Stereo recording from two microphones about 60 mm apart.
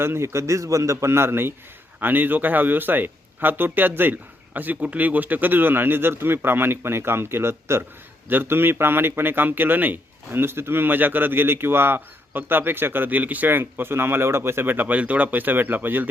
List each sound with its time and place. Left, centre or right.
0.0 s a man's voice: right
0.9 s a man's voice: right